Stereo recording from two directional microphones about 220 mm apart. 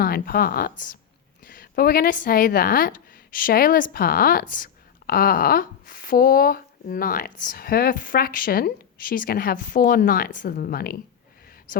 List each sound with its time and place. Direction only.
0.0 s a woman's voice: 40° left (ahead or behind)